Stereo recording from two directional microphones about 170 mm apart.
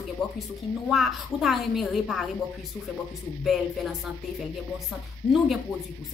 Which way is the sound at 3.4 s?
Centre (ahead or behind).